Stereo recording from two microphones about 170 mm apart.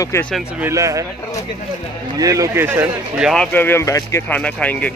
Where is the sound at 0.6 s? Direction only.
15° right (ahead or behind).